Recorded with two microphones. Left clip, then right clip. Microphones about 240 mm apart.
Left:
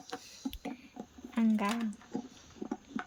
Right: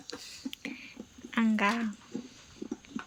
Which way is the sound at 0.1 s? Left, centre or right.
Centre.